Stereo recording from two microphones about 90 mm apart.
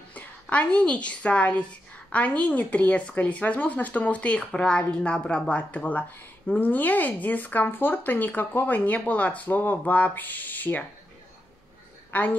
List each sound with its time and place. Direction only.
0.1 s a woman's voice: 15° left (ahead or behind)
12.1 s a woman's voice: 20° left (ahead or behind)